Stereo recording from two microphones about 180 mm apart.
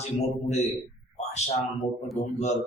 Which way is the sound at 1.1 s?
40° left (ahead or behind).